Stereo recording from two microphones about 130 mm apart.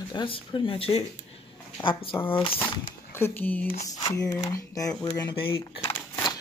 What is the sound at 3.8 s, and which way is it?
Speech, 25° left (ahead or behind).